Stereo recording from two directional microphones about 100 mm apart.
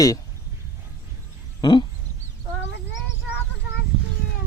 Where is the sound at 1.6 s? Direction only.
50° left (ahead or behind).